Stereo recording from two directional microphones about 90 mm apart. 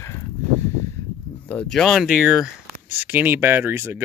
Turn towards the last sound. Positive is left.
turn(degrees=-25)  # may be behind; listen again after turning